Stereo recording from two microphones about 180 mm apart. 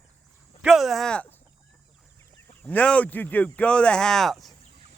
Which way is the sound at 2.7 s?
5° left (ahead or behind).